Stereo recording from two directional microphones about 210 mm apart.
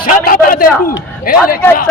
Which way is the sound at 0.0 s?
40° left (ahead or behind).